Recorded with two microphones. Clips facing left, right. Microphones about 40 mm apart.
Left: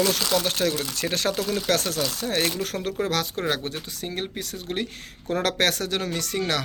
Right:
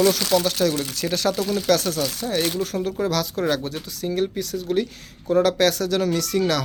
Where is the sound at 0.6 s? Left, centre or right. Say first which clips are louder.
Right 3 dB; left.